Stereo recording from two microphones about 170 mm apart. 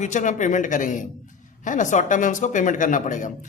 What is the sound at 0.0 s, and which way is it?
Speech, 45° left (ahead or behind).